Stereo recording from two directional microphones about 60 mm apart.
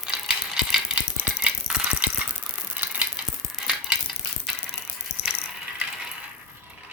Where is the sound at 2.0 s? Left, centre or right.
Right.